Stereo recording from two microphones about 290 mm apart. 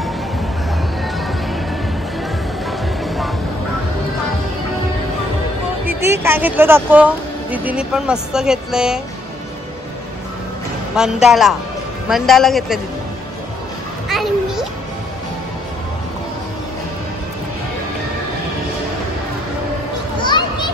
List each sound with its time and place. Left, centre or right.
1.0 s music: centre
6.2 s speech: centre
11.0 s speech: centre
14.0 s children playing: centre
20.2 s children playing: centre